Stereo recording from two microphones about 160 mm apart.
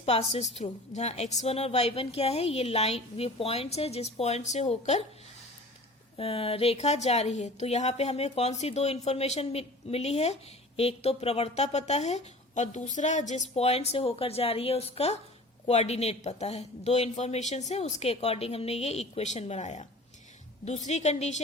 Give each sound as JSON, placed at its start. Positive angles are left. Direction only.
{"t": 0.0, "sound": "a woman's voice", "side_deg": 40}
{"t": 6.1, "sound": "a woman's voice", "side_deg": 35}